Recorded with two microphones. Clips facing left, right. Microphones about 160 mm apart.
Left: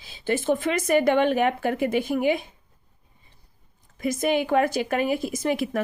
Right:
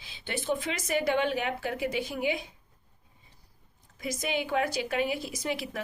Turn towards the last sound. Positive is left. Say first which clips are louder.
# left 8 dB
turn(degrees=50)  # may be behind; listen again after turning